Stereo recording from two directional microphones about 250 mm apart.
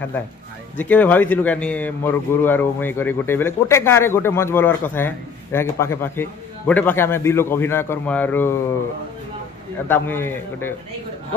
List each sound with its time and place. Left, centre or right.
0.7 s a man's voice: centre
9.8 s a man's voice: centre